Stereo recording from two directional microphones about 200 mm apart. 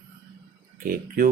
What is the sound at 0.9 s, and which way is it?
Speech, 45° right (ahead or behind).